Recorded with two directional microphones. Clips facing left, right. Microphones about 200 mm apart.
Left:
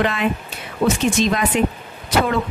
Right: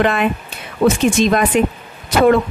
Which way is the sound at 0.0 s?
55° right (ahead or behind).